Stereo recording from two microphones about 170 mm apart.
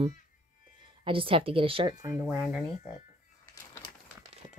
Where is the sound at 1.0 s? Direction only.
30° right (ahead or behind).